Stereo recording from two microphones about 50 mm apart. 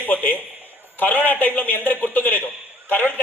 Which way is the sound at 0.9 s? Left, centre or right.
Left.